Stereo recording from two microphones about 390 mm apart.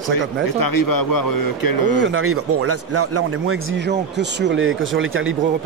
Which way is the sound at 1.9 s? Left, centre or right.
Right.